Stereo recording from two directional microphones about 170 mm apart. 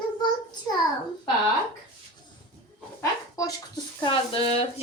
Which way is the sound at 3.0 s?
20° left (ahead or behind).